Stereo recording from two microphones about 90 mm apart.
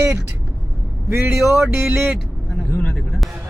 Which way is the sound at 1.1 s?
5° right (ahead or behind).